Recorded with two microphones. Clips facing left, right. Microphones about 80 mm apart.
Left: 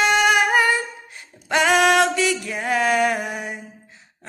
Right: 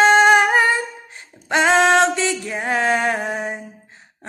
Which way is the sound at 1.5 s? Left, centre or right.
Right.